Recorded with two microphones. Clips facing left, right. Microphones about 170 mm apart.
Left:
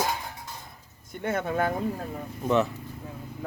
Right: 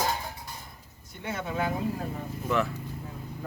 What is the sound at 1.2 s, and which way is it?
Speech, 55° left (ahead or behind).